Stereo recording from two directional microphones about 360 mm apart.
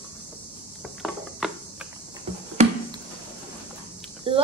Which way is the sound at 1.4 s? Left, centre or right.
Centre.